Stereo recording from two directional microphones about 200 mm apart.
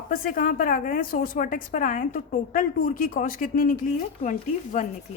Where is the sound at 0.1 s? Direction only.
45° left (ahead or behind).